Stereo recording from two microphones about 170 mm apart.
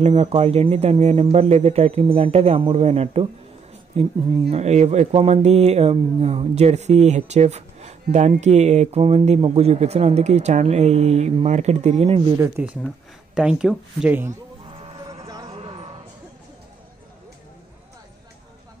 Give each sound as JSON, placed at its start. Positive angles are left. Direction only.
{"t": 0.0, "sound": "speech", "side_deg": -35}
{"t": 12.4, "sound": "speech", "side_deg": -15}
{"t": 12.8, "sound": "speech", "side_deg": -5}
{"t": 14.8, "sound": "music", "side_deg": -25}
{"t": 15.4, "sound": "a sound", "side_deg": -35}